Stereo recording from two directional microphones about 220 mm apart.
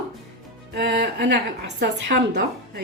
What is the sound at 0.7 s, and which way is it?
Speech, 50° right (ahead or behind).